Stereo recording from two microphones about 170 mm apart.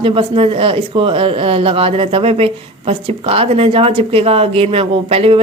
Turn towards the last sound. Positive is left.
turn(degrees=-35)  # may be behind; listen again after turning